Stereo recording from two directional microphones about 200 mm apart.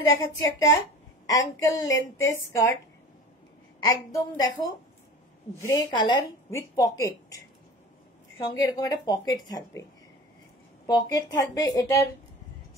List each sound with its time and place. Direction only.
0.4 s speech: 75° left (ahead or behind)
1.2 s a woman's voice: 15° left (ahead or behind)
3.8 s a woman's voice: 15° left (ahead or behind)
10.9 s a woman's voice: 20° left (ahead or behind)